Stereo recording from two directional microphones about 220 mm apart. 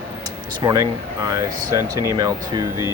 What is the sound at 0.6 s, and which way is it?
Speech, 20° right (ahead or behind).